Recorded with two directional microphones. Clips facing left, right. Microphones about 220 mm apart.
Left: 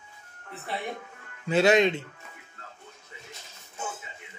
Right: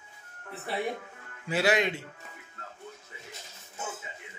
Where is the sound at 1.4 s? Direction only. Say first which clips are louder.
Left 6 dB; 25° left (ahead or behind).